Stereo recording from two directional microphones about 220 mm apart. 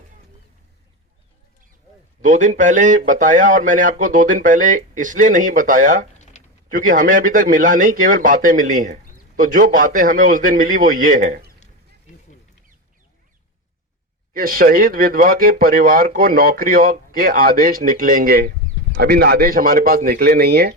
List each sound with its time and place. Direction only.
2.2 s speech: 35° right (ahead or behind)
6.3 s a sound: 30° left (ahead or behind)
6.7 s speech: 35° right (ahead or behind)
14.3 s a man's voice: 40° right (ahead or behind)